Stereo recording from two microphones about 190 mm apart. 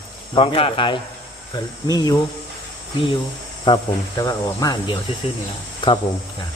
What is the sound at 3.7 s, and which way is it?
Cricket, 25° left (ahead or behind).